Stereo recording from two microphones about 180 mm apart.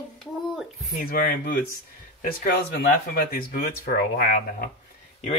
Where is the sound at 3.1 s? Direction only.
55° left (ahead or behind).